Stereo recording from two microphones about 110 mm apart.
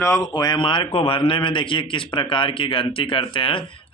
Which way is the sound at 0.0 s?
30° left (ahead or behind).